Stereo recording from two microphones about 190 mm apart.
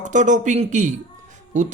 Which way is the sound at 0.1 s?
40° right (ahead or behind).